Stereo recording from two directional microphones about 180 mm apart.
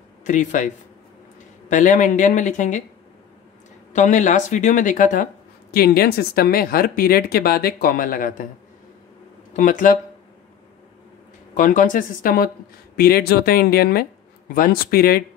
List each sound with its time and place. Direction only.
0.2 s speech: 45° left (ahead or behind)
1.7 s speech: 45° left (ahead or behind)
3.9 s speech: 45° left (ahead or behind)
9.6 s speech: 50° left (ahead or behind)
11.5 s speech: 45° left (ahead or behind)